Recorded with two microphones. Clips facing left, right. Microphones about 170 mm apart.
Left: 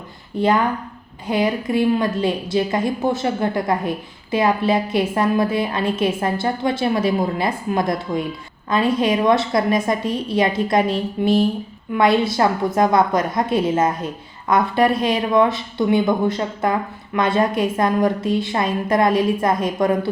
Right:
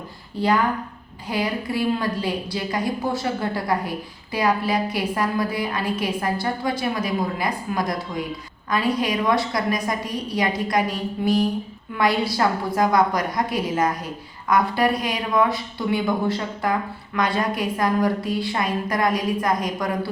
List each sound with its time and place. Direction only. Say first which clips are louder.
0.3 s a woman's voice: left 3 dB; 20° left (ahead or behind)